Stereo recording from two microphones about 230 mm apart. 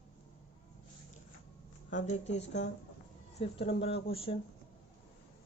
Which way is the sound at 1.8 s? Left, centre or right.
Left.